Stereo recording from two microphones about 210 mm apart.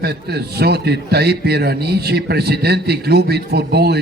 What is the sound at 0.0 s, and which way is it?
A man's voice, 50° right (ahead or behind).